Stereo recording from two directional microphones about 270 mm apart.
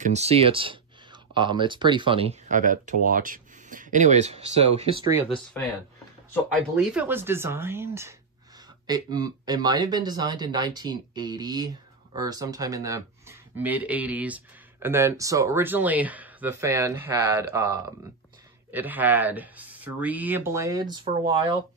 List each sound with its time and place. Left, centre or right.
0.0 s speech: right
6.7 s speech: centre